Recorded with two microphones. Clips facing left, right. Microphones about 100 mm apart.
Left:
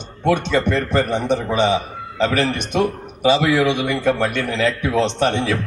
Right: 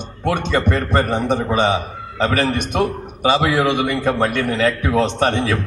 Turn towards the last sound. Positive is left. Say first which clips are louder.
# right 1 dB
turn(degrees=-45)  # may be behind; listen again after turning